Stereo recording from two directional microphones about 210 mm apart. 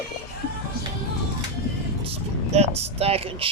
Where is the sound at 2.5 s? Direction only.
30° right (ahead or behind).